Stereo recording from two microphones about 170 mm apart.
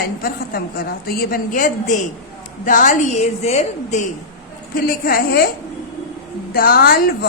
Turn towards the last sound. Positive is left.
turn(degrees=60)  # may be behind; listen again after turning